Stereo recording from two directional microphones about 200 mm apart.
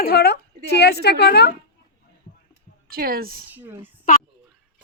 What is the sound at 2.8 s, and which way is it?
Speech, 45° right (ahead or behind).